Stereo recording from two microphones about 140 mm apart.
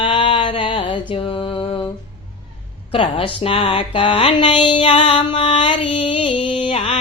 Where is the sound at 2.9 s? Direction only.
40° left (ahead or behind).